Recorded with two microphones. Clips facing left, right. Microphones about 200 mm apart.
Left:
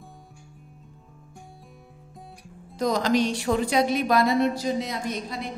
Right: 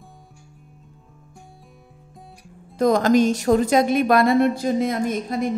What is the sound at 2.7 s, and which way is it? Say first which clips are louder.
Speech: right 6 dB; 55° right (ahead or behind).